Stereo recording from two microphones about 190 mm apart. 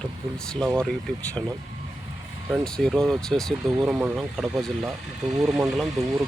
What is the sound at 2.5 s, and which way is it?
Speech, 5° left (ahead or behind).